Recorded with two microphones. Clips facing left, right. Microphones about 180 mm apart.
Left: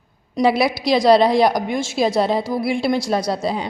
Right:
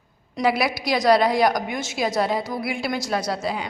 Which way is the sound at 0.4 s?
35° left (ahead or behind).